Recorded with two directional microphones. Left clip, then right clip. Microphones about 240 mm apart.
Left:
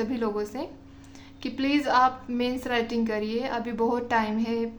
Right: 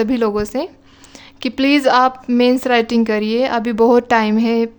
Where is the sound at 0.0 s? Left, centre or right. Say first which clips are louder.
Right 11 dB; right.